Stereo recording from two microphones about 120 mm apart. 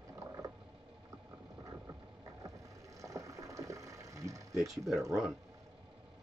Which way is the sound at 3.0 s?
25° right (ahead or behind).